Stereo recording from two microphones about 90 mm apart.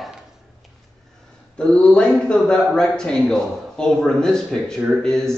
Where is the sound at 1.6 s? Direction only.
10° left (ahead or behind).